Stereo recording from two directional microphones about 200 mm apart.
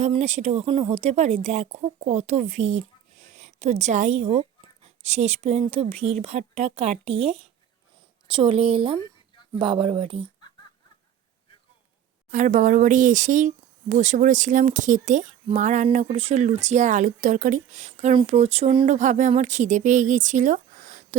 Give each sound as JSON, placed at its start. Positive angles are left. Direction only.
{"t": 0.0, "sound": "speech", "side_deg": -35}
{"t": 8.4, "sound": "speech", "side_deg": -30}
{"t": 12.3, "sound": "speech", "side_deg": -40}